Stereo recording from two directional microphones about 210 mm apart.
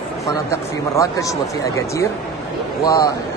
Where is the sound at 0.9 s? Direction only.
15° left (ahead or behind).